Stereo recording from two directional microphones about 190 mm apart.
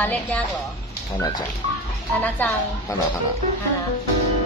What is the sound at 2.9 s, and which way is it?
Speech, 20° left (ahead or behind).